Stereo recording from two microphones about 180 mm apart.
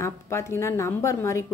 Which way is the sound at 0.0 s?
15° left (ahead or behind).